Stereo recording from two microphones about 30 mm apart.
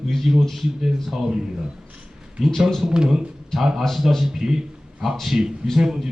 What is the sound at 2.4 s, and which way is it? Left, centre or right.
Speech, centre.